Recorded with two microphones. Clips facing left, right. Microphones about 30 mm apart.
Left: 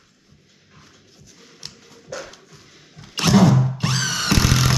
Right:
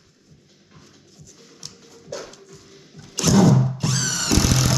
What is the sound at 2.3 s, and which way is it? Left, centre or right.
Music, centre.